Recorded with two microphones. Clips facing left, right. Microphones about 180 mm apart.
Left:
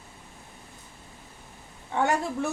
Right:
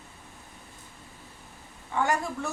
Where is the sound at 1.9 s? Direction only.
20° left (ahead or behind).